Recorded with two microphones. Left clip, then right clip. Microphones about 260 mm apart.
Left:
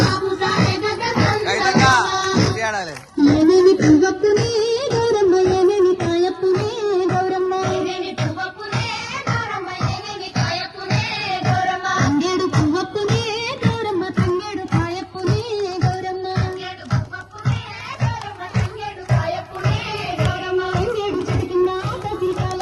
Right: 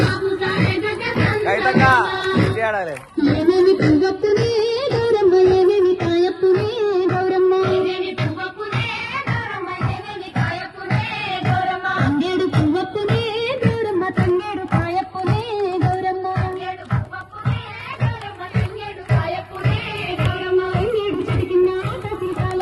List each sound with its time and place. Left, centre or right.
0.0 s music: left
0.3 s music: centre
3.2 s music: left; by 13.6 s centre
19.1 s music: left